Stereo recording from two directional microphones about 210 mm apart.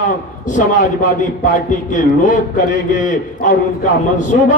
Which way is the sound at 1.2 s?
35° left (ahead or behind).